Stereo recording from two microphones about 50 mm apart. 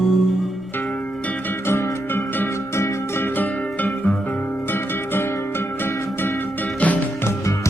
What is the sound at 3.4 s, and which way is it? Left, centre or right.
Music, left.